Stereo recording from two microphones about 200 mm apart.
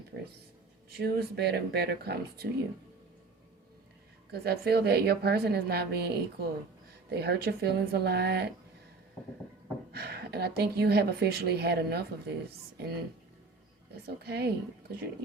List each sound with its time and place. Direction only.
0.1 s a woman's voice: 55° right (ahead or behind)
4.3 s a woman's voice: 50° right (ahead or behind)
9.9 s a woman's voice: 55° right (ahead or behind)
13.9 s a woman's voice: 55° right (ahead or behind)